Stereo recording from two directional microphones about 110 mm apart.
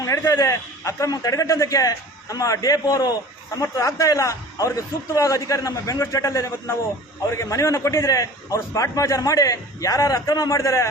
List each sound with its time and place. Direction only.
0.3 s a man's voice: 30° left (ahead or behind)